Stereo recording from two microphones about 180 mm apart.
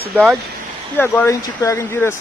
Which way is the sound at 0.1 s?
Centre (ahead or behind).